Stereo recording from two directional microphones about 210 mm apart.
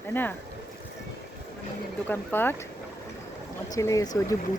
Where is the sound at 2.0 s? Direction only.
10° left (ahead or behind).